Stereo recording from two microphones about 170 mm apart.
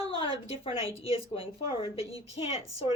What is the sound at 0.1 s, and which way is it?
Speech, 30° left (ahead or behind).